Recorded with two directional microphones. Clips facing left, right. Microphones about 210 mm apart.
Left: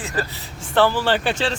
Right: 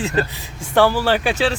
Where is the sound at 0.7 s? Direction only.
10° right (ahead or behind).